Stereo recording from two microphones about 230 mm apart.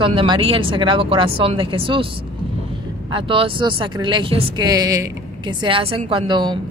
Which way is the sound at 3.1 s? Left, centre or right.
Right.